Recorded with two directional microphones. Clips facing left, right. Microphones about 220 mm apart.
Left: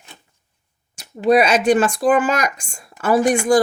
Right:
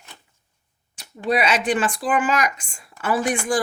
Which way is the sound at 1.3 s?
45° left (ahead or behind).